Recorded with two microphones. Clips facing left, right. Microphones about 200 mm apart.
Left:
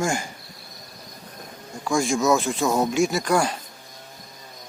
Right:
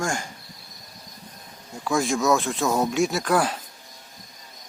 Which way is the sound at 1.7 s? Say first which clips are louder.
Left 1 dB; 5° right (ahead or behind).